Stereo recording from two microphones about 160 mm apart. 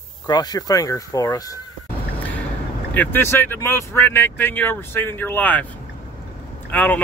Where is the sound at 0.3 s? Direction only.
25° left (ahead or behind).